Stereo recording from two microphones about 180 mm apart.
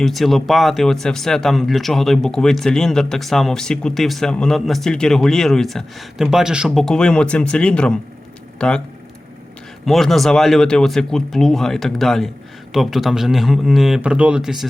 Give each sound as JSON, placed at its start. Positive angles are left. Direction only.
{"t": 0.0, "sound": "speech", "side_deg": 0}
{"t": 9.8, "sound": "speech", "side_deg": 0}